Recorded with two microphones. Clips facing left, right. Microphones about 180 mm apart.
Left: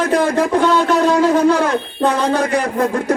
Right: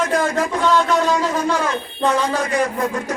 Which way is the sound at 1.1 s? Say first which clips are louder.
Left 7 dB; 60° left (ahead or behind).